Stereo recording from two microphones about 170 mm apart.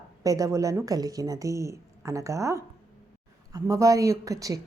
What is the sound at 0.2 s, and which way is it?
Speech, 20° right (ahead or behind).